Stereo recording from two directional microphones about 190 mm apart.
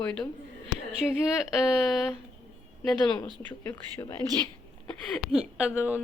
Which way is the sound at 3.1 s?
25° left (ahead or behind).